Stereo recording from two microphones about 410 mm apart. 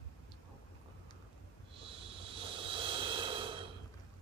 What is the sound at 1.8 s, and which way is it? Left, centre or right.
Snort, centre.